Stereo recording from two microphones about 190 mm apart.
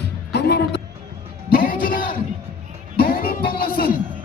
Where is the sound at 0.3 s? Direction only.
60° left (ahead or behind).